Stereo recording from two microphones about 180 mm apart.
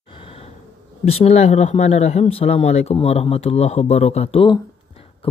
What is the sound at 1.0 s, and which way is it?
Speech, 35° left (ahead or behind).